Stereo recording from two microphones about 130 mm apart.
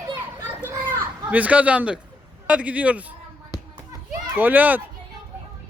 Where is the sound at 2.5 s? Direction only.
10° right (ahead or behind).